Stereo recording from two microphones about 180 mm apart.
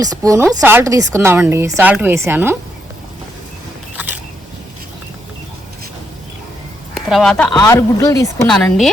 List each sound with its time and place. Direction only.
0.0 s speech: 20° right (ahead or behind)
3.9 s single-lens reflex camera: 10° right (ahead or behind)
6.9 s speech: centre (ahead or behind)
7.5 s speech: 20° left (ahead or behind)
8.4 s a woman's voice: centre (ahead or behind)